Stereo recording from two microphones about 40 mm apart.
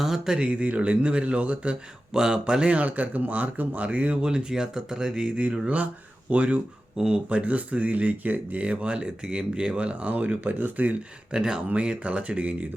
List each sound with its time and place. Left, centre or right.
0.0 s speech: centre
0.3 s speech: right
2.1 s speech: centre
2.7 s speech: right
3.8 s speech: right
4.2 s speech: centre
5.6 s speech: right
6.9 s speech: centre
7.3 s speech: right
8.6 s speech: right
10.1 s speech: right
11.3 s speech: right